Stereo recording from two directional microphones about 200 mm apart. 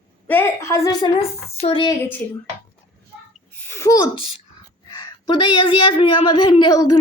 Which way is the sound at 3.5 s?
10° left (ahead or behind).